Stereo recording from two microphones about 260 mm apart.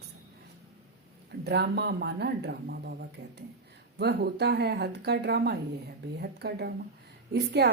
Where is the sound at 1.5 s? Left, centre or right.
Right.